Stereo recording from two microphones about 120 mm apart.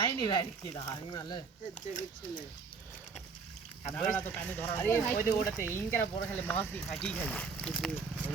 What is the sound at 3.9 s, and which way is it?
Speech, 15° left (ahead or behind).